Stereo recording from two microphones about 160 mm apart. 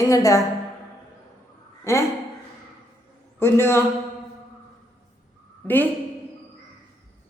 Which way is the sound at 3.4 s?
15° left (ahead or behind).